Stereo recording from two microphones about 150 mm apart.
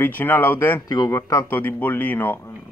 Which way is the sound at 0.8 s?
25° left (ahead or behind).